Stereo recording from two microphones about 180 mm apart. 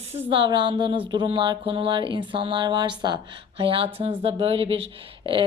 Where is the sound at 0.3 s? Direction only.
25° right (ahead or behind).